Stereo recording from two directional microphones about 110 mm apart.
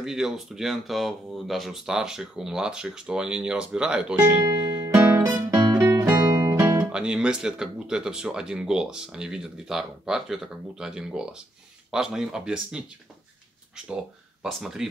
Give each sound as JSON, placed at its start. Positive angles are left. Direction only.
{"t": 0.0, "sound": "speech", "side_deg": -5}
{"t": 4.9, "sound": "music", "side_deg": -20}
{"t": 6.1, "sound": "music", "side_deg": -35}
{"t": 6.6, "sound": "speech", "side_deg": -15}
{"t": 14.4, "sound": "speech", "side_deg": -5}